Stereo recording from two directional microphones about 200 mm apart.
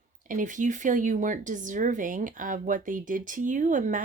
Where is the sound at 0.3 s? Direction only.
40° right (ahead or behind).